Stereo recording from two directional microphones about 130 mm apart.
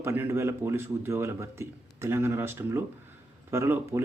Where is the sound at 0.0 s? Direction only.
20° right (ahead or behind).